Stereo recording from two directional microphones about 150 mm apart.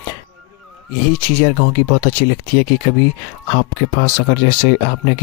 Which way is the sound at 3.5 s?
70° left (ahead or behind).